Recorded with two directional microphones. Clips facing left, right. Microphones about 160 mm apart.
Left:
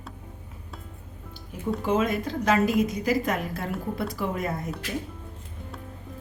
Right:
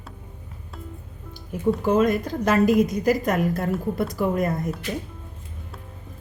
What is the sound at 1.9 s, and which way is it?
A woman's voice, 45° right (ahead or behind).